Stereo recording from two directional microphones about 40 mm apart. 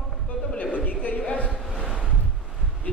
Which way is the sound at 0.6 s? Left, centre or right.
Left.